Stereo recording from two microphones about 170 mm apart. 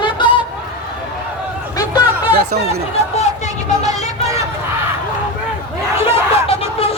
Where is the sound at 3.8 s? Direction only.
20° right (ahead or behind).